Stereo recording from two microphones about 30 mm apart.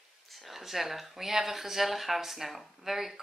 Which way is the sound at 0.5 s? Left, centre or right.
Centre.